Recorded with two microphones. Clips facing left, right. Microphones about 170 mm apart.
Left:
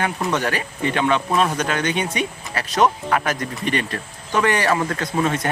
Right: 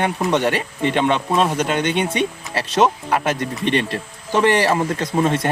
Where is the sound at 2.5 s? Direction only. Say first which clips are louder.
Right 1 dB; 25° right (ahead or behind).